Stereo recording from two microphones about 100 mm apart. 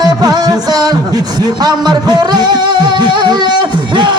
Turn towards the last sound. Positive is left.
turn(degrees=-50)  # may be behind; listen again after turning